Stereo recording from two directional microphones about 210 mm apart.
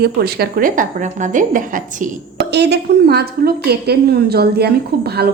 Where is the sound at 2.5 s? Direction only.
55° right (ahead or behind).